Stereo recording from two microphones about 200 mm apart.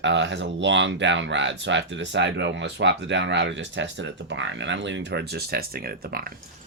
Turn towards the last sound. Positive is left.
turn(degrees=-50)  # may be behind; listen again after turning